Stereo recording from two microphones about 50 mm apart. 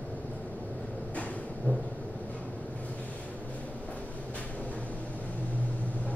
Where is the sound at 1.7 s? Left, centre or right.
Left.